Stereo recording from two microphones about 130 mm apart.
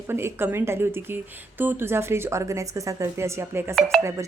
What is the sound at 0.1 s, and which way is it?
A woman's voice, 20° right (ahead or behind).